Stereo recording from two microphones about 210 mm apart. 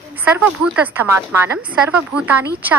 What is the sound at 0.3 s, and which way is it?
A woman's voice, 5° right (ahead or behind).